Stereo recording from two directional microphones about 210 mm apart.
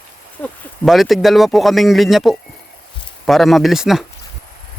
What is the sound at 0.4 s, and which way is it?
Speech, centre (ahead or behind).